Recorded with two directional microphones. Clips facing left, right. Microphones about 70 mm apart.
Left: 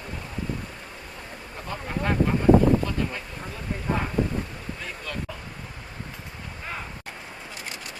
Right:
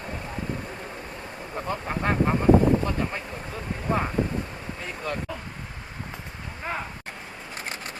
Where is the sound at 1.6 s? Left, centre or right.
Right.